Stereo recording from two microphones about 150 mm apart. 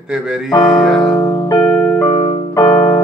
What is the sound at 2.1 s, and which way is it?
Keyboard, 25° left (ahead or behind).